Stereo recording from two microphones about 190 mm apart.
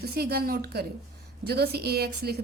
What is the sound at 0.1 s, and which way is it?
A woman's voice, 55° right (ahead or behind).